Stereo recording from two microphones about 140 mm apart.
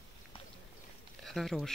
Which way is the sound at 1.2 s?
Centre (ahead or behind).